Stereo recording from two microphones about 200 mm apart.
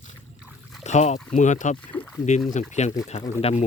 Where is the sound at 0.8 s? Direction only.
35° left (ahead or behind).